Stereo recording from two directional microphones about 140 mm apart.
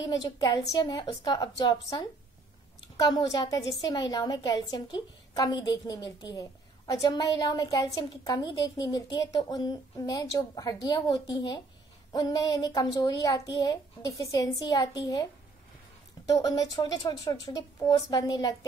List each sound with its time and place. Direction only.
0.2 s a woman's voice: 25° left (ahead or behind)
16.3 s a woman's voice: 25° left (ahead or behind)